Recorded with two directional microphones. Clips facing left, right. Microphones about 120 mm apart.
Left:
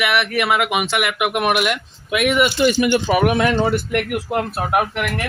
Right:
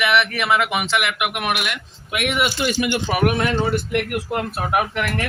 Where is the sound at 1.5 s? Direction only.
50° left (ahead or behind).